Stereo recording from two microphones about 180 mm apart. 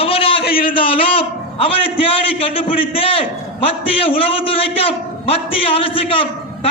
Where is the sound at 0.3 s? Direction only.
60° left (ahead or behind).